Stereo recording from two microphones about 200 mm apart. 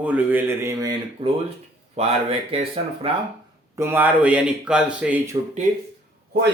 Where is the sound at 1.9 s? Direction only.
30° right (ahead or behind).